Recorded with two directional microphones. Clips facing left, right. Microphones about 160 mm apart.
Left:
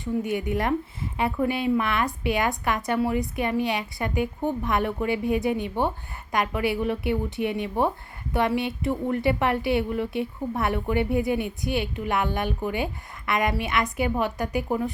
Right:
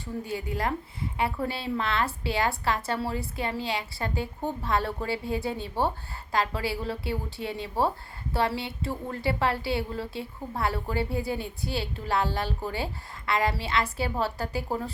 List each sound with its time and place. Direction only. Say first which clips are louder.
0.0 s a woman's voice: left 7 dB; 20° left (ahead or behind)